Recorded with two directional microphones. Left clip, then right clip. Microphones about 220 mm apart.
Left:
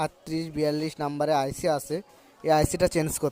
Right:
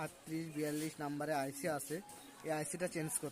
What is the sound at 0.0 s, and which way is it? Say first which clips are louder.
Speech: left 14 dB; 30° left (ahead or behind).